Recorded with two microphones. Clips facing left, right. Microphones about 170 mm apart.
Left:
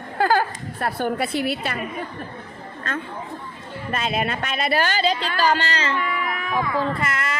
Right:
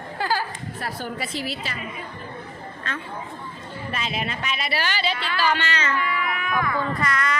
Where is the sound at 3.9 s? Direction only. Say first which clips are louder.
Left 5 dB; 50° left (ahead or behind); by 6.6 s 35° left (ahead or behind).